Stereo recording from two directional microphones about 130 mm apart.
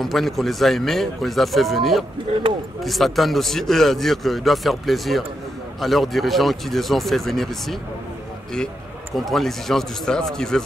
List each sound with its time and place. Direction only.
0.0 s a man's voice: centre (ahead or behind)
9.1 s a man's voice: centre (ahead or behind)